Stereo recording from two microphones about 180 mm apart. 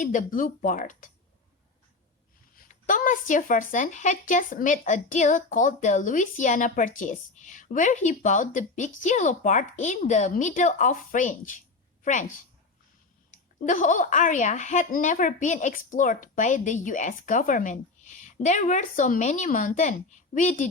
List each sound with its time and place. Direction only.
0.0 s speech: 45° left (ahead or behind)
2.6 s speech: 50° left (ahead or behind)
13.3 s speech: 45° left (ahead or behind)